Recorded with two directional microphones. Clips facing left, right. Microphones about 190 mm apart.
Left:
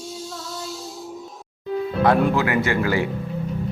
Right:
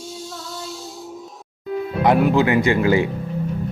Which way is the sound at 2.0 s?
15° right (ahead or behind).